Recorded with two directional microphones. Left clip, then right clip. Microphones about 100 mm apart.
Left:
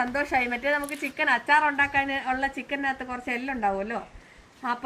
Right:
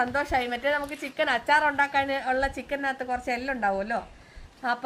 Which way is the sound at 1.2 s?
40° right (ahead or behind).